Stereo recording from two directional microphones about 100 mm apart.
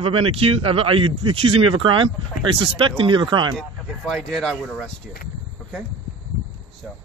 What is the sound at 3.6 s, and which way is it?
Speech, centre (ahead or behind).